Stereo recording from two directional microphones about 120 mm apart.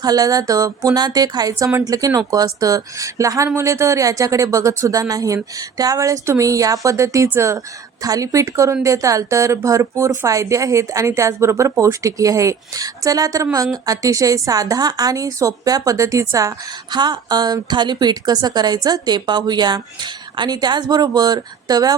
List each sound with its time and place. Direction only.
0.0 s a woman's voice: 30° right (ahead or behind)